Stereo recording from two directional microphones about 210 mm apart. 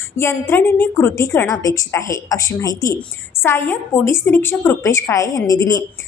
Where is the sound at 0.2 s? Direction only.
10° left (ahead or behind).